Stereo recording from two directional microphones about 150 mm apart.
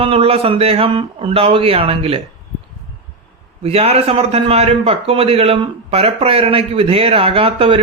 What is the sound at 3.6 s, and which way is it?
A man's voice, 40° right (ahead or behind).